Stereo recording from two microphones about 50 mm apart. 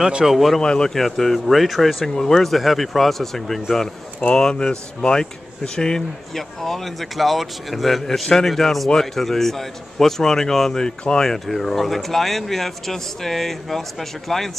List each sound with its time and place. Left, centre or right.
0.2 s speech: centre
0.6 s speech: centre
4.4 s a man's voice: centre
11.3 s speech: centre